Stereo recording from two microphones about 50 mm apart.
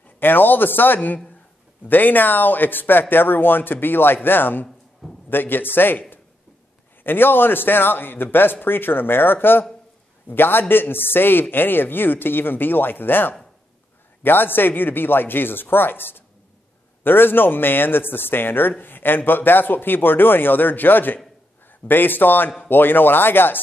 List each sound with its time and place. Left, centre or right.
0.2 s a man's voice: left